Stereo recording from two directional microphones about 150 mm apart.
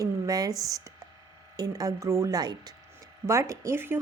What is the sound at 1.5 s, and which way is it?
Speech, 25° right (ahead or behind).